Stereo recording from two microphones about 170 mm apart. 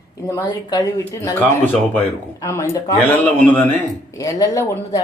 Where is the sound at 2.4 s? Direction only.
15° left (ahead or behind).